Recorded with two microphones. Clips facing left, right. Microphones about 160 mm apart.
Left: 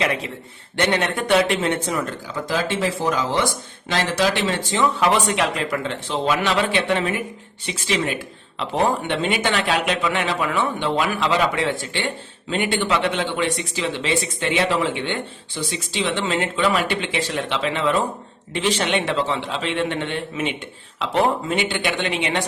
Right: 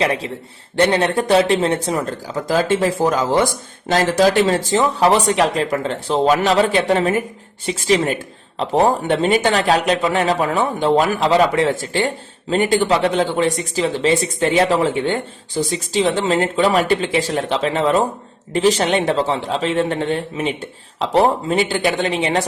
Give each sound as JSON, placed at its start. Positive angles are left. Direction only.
{"t": 0.0, "sound": "speech", "side_deg": -35}